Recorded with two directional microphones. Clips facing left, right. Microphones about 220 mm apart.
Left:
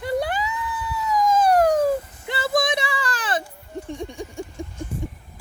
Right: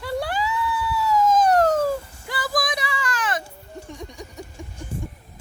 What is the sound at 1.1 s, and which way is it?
Child singing, 15° left (ahead or behind).